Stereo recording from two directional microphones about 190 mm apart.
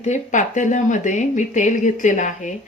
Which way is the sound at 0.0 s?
40° left (ahead or behind).